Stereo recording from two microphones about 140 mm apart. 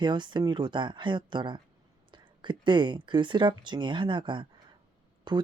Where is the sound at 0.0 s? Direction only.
35° right (ahead or behind).